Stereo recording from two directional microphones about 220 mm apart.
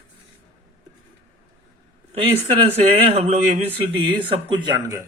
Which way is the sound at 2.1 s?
25° right (ahead or behind).